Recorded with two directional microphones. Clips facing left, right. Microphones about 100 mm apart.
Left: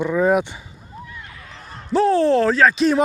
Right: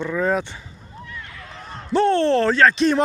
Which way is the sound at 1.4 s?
35° right (ahead or behind).